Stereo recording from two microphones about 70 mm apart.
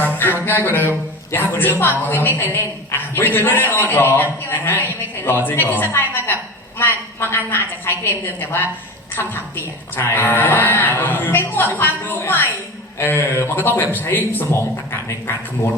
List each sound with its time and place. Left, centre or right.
0.0 s a man's voice: left
9.9 s a man's voice: left